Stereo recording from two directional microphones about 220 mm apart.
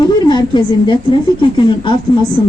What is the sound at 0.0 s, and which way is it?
A woman's voice, 20° left (ahead or behind).